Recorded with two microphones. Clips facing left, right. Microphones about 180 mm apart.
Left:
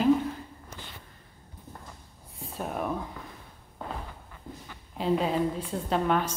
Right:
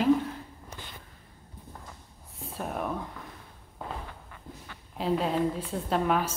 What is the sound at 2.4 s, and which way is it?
Speech, centre (ahead or behind).